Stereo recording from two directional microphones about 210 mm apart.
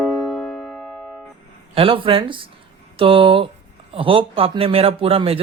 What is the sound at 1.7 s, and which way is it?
A man's voice, 25° right (ahead or behind).